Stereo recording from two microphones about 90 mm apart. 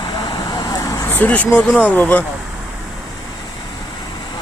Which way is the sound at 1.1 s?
20° left (ahead or behind).